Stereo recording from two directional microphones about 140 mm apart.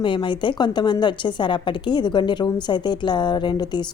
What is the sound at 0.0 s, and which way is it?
A woman's voice, 35° left (ahead or behind).